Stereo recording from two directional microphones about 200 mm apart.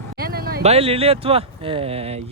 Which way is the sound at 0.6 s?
30° right (ahead or behind).